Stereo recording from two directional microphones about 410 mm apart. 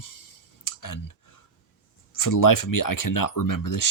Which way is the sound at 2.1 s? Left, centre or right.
Left.